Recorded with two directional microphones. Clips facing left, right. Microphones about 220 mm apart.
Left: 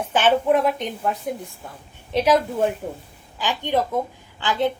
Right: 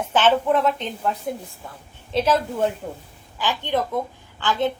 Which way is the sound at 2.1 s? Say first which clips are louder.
Left 2 dB; 15° left (ahead or behind).